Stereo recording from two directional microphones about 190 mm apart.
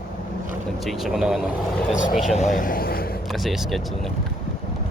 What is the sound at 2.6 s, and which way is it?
Speech, 45° left (ahead or behind).